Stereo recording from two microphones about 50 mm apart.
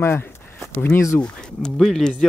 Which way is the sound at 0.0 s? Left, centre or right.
Left.